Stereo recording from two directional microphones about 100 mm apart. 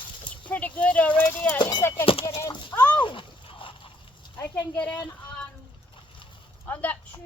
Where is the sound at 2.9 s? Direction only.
55° left (ahead or behind).